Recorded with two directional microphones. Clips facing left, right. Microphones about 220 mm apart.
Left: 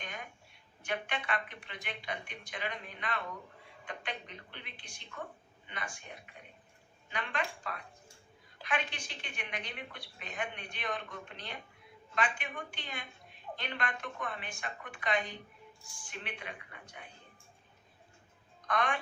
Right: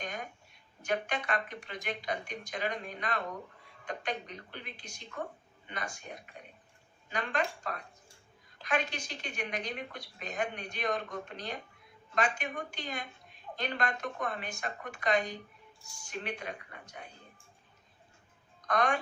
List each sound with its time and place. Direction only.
0.0 s a sound: 40° right (ahead or behind)
0.8 s a woman's voice: 40° right (ahead or behind)
18.7 s a woman's voice: 40° right (ahead or behind)